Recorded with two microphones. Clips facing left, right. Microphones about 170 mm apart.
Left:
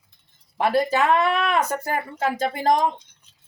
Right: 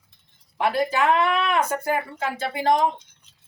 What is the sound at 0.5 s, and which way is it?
Speech, 40° left (ahead or behind).